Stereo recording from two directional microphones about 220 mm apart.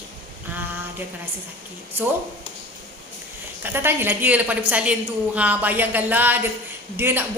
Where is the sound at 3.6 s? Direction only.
10° right (ahead or behind).